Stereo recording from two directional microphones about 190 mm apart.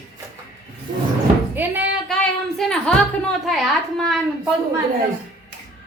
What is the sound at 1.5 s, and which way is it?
Speech, 10° right (ahead or behind).